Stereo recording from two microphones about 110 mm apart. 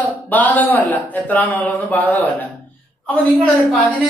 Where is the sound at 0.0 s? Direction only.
15° left (ahead or behind).